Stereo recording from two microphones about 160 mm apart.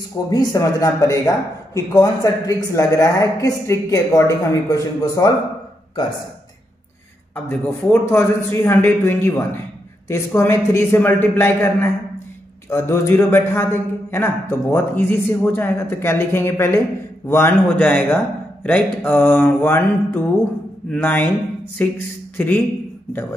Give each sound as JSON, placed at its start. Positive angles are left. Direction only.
{"t": 0.3, "sound": "speech", "side_deg": 20}
{"t": 7.4, "sound": "a man's voice", "side_deg": 15}